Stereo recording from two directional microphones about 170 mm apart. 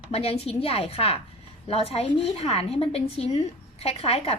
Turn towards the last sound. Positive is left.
turn(degrees=35)  # may be behind; listen again after turning